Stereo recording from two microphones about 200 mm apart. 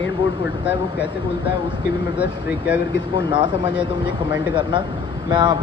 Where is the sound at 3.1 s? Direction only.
25° right (ahead or behind).